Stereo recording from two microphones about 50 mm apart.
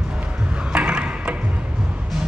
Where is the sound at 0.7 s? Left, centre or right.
Right.